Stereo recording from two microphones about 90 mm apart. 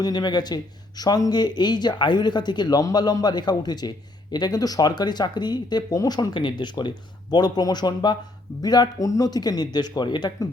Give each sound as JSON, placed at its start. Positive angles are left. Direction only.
{"t": 0.0, "sound": "speech", "side_deg": 50}